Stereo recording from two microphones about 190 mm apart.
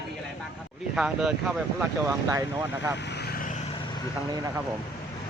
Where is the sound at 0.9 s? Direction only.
5° right (ahead or behind).